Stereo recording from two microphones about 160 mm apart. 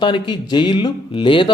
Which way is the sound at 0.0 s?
30° left (ahead or behind).